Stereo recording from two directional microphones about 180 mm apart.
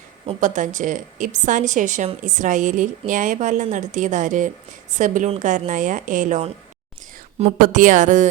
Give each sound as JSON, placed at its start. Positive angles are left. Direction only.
{"t": 0.3, "sound": "a woman's voice", "side_deg": -45}
{"t": 7.6, "sound": "a woman's voice", "side_deg": -45}